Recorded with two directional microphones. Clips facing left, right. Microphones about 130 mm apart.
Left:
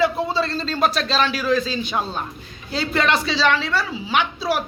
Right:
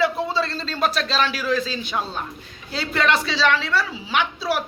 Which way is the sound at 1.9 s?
40° left (ahead or behind).